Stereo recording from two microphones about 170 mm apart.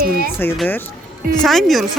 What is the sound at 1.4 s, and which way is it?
Speech, centre (ahead or behind).